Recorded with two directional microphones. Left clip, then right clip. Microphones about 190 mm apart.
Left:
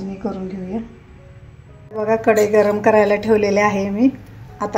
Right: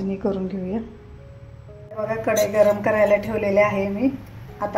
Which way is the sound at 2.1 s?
45° left (ahead or behind).